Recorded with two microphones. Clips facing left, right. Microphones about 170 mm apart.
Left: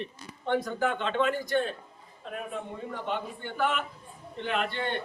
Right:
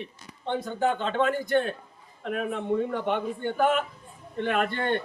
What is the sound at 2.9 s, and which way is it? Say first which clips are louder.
A man's voice: right 6 dB; 55° right (ahead or behind).